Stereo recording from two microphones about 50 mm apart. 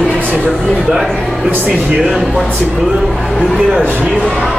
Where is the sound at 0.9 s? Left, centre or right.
Centre.